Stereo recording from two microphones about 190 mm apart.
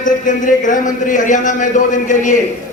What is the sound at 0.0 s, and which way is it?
A man's voice, 45° left (ahead or behind).